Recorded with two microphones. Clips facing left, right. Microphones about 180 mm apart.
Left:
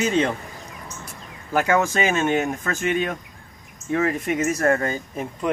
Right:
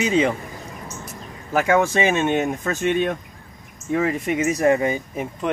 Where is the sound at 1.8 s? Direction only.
15° right (ahead or behind).